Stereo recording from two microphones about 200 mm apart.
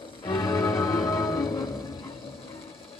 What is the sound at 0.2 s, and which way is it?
Music, 20° left (ahead or behind).